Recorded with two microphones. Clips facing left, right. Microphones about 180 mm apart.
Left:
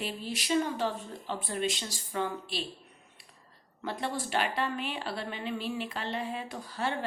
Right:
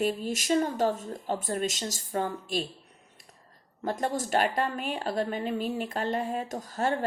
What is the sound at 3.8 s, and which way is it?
Speech, 45° right (ahead or behind).